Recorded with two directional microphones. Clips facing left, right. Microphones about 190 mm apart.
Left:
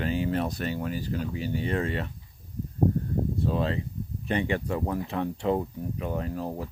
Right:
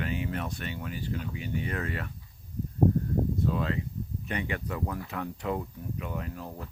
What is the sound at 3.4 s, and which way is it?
Speech, 30° left (ahead or behind).